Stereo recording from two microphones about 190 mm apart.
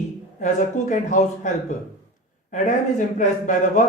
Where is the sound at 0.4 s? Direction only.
40° left (ahead or behind).